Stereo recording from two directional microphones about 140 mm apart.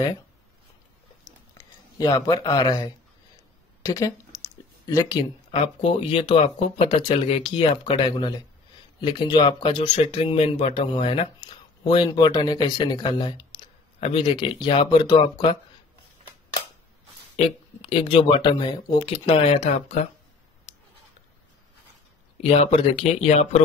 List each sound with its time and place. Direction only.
1.6 s speech: 25° left (ahead or behind)
5.5 s speech: 40° left (ahead or behind)
17.4 s speech: 45° left (ahead or behind)
20.7 s a sound: 55° left (ahead or behind)
22.4 s speech: 45° left (ahead or behind)